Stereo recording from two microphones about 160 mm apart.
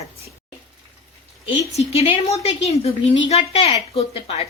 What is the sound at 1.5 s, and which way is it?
A woman's voice, 40° left (ahead or behind).